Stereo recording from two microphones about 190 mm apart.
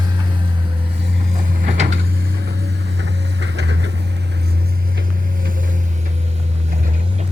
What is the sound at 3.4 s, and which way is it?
Vehicle, 70° right (ahead or behind).